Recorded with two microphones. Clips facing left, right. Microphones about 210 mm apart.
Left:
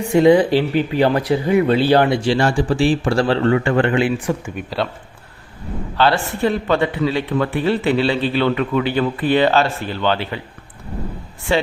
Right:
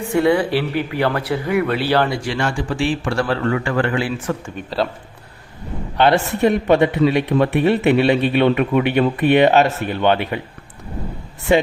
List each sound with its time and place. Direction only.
0.1 s speech: 20° left (ahead or behind)
4.4 s speech: 5° left (ahead or behind)
6.0 s speech: 20° right (ahead or behind)